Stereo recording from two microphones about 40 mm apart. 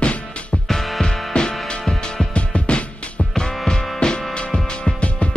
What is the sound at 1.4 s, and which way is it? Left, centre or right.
Music, left.